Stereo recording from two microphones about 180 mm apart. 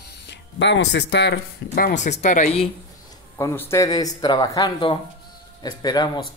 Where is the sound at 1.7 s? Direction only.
45° left (ahead or behind).